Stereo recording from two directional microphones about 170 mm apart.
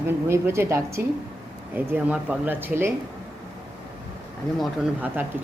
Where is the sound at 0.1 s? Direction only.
15° right (ahead or behind).